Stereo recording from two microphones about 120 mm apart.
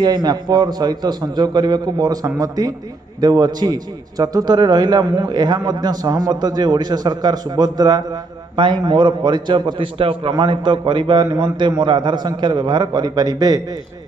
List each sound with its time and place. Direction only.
0.0 s a man's voice: 35° right (ahead or behind)